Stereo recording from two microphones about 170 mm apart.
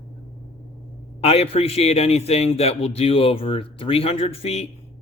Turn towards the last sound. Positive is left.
turn(degrees=35)  # may be behind; listen again after turning